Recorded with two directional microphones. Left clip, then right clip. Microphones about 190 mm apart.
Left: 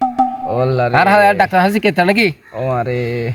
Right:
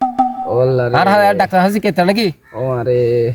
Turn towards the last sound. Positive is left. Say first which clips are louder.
# right 6 dB
turn(degrees=-55)  # may be behind; listen again after turning